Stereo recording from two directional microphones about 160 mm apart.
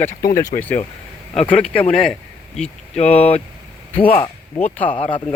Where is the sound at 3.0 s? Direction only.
40° left (ahead or behind).